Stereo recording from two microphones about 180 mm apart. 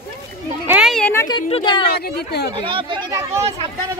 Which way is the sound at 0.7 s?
Centre (ahead or behind).